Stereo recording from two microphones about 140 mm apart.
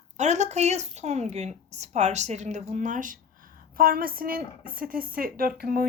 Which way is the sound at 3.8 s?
90° right.